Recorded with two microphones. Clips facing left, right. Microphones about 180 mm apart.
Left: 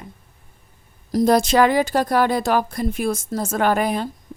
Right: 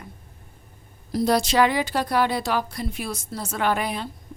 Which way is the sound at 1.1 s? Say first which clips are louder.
Left 4 dB; 50° left (ahead or behind).